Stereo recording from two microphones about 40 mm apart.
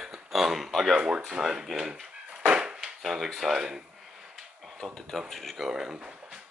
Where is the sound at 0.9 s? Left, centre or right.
Right.